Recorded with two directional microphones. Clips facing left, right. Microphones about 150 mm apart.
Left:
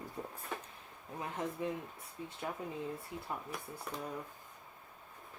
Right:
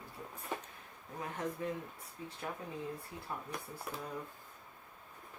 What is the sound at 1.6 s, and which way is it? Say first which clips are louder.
Speech: left 2 dB; 20° left (ahead or behind).